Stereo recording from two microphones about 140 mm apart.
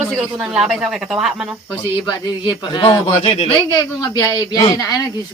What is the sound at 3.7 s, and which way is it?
Speech, 25° left (ahead or behind).